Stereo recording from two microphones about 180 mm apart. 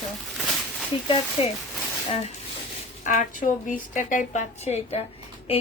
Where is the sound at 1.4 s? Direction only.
30° left (ahead or behind).